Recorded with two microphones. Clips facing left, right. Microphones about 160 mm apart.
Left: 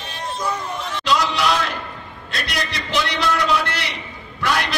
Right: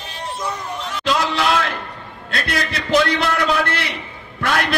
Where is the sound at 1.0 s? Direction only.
55° right (ahead or behind).